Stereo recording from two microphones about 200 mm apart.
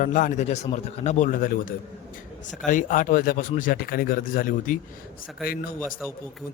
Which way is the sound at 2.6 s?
40° left (ahead or behind).